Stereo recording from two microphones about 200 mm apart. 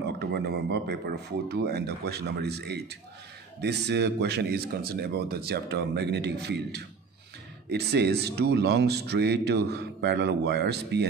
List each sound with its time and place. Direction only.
0.0 s speech: 55° right (ahead or behind)
7.9 s speech: 55° right (ahead or behind)